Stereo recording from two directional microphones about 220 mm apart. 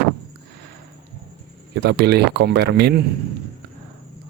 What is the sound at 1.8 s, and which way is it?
Speech, 50° right (ahead or behind).